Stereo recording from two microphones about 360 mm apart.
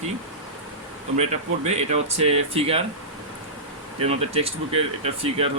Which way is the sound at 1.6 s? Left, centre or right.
Centre.